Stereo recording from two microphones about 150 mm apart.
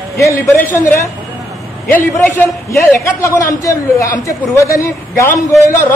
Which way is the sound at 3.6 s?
20° left (ahead or behind).